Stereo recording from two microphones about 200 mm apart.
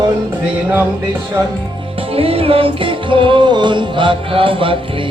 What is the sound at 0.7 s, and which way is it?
Music, 10° right (ahead or behind).